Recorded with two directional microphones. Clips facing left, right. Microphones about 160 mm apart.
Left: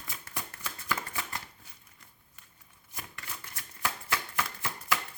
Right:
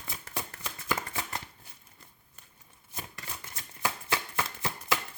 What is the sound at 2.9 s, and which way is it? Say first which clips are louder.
Shuffling cards: right 2 dB; 25° right (ahead or behind).